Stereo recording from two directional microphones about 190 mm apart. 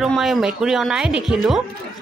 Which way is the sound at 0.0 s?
Centre (ahead or behind).